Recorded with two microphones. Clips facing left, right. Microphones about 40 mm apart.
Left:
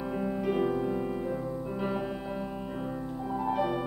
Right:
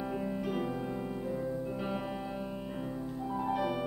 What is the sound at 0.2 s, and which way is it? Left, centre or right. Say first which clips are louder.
Music: left 6 dB; centre.